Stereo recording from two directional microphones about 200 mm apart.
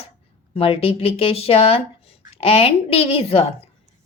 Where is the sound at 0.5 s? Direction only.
30° left (ahead or behind).